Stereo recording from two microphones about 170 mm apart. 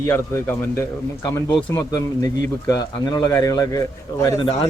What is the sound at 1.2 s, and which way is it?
Speech, 25° left (ahead or behind).